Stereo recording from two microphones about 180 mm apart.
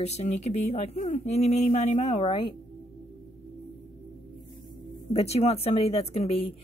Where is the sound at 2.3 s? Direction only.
25° left (ahead or behind).